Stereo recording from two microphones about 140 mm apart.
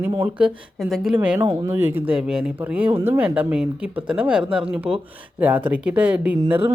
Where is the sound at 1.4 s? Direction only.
20° right (ahead or behind).